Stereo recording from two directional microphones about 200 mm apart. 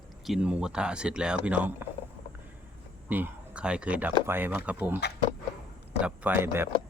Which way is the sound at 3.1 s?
5° right (ahead or behind).